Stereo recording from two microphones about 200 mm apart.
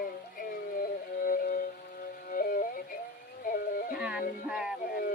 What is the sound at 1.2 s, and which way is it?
Music, 45° left (ahead or behind).